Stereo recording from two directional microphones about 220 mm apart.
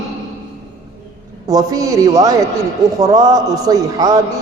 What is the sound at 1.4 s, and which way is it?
A man's voice, 15° right (ahead or behind).